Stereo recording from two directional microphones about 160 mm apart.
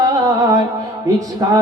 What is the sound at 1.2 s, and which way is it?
Music, 20° right (ahead or behind).